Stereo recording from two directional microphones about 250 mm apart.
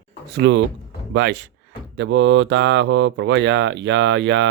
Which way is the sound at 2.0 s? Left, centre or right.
Right.